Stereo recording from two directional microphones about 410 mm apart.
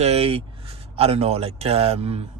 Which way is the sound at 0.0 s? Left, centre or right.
Centre.